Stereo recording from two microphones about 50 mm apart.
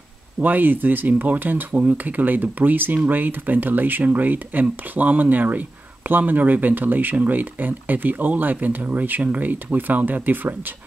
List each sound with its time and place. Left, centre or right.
0.4 s speech: right